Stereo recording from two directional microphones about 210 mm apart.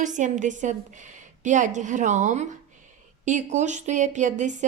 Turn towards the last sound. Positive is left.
turn(degrees=-35)  # may be behind; listen again after turning